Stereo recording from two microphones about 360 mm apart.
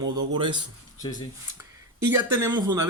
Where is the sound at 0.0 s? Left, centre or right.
Centre.